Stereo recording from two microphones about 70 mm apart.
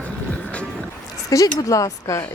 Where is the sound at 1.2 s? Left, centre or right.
Left.